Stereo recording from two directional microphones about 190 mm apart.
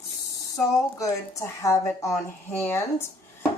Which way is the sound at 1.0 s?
15° left (ahead or behind).